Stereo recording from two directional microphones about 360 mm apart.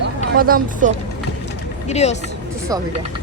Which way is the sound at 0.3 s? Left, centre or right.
Right.